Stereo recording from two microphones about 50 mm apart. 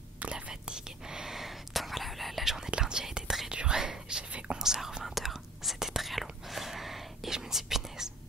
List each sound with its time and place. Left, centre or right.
0.5 s whispering: centre
4.6 s whispering: centre